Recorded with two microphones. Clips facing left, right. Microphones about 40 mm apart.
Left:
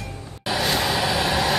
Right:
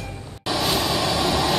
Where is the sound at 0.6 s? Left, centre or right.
Centre.